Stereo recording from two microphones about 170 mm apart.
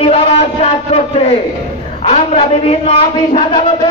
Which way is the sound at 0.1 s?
40° left (ahead or behind).